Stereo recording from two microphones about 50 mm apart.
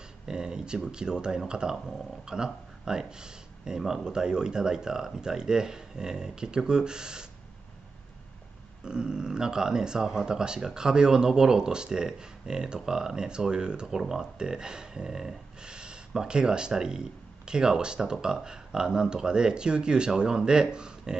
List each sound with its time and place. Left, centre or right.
0.3 s speech: centre
8.8 s speech: centre